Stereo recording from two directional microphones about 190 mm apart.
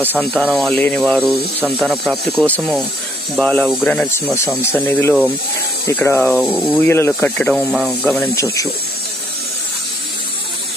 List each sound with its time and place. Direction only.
0.4 s speech: centre (ahead or behind)
1.2 s speech: 10° right (ahead or behind); by 6.2 s 15° left (ahead or behind)
6.2 s speech: centre (ahead or behind)
6.8 s speech: 10° left (ahead or behind)
8.4 s speech: 15° left (ahead or behind)